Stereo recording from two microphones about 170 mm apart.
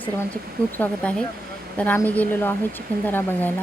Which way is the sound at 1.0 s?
10° left (ahead or behind).